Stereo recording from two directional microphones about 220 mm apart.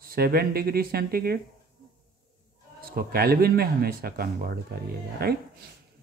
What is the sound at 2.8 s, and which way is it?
Speech, 40° right (ahead or behind).